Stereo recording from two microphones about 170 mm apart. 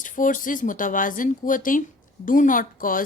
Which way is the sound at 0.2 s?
50° left (ahead or behind).